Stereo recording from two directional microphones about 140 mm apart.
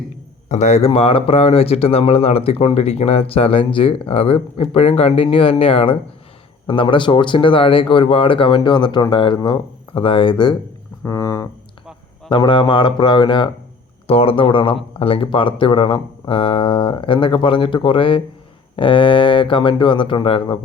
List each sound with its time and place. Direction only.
0.4 s speech: 55° left (ahead or behind); by 10.5 s 35° left (ahead or behind)
11.0 s music: 20° left (ahead or behind)
12.3 s speech: 35° left (ahead or behind)